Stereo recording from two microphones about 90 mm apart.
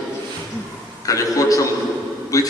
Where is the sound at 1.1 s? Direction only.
40° left (ahead or behind).